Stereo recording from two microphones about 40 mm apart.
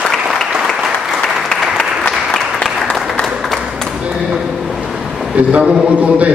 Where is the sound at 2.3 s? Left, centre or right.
Centre.